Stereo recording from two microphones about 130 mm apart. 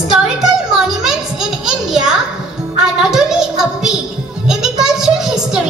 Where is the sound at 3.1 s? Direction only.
5° right (ahead or behind).